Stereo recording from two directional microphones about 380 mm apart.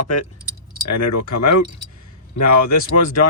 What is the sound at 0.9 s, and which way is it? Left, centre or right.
Speech, left.